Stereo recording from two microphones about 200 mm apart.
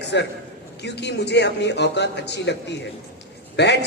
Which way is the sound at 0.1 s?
65° left (ahead or behind).